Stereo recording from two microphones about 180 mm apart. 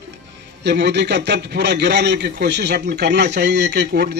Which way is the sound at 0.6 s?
70° right (ahead or behind).